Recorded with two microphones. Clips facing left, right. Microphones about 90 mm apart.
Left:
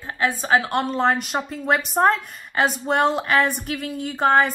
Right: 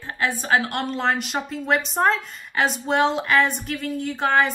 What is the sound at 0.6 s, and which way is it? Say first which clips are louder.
A woman's voice: left 3 dB; 40° left (ahead or behind).